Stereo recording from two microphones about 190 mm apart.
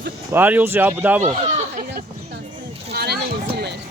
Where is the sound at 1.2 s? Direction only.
35° right (ahead or behind).